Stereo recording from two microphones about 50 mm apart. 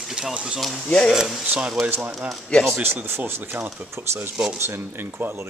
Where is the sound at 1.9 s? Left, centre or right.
Right.